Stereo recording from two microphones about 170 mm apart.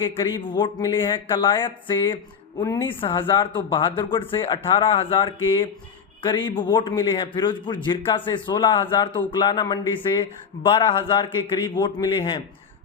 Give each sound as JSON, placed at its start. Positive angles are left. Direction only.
{"t": 0.2, "sound": "speech", "side_deg": 30}